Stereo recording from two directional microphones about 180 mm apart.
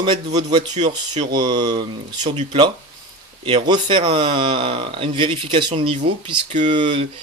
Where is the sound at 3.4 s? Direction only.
30° right (ahead or behind).